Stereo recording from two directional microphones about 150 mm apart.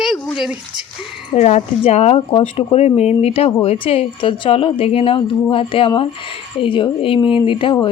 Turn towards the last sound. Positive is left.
turn(degrees=35)  # may be behind; listen again after turning